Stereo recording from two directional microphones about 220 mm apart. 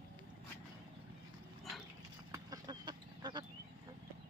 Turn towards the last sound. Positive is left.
turn(degrees=-20)  # may be behind; listen again after turning